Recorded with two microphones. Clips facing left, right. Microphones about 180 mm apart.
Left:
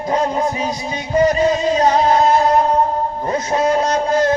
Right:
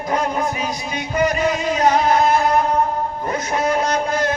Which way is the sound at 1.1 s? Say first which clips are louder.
Left 5 dB; 30° left (ahead or behind).